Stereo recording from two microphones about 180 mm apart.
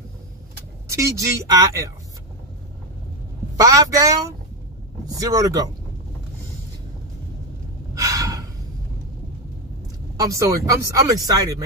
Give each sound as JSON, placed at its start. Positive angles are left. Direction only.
{"t": 0.8, "sound": "speech", "side_deg": -15}
{"t": 3.6, "sound": "speech", "side_deg": -20}
{"t": 7.9, "sound": "gasp", "side_deg": -20}
{"t": 10.1, "sound": "speech", "side_deg": -20}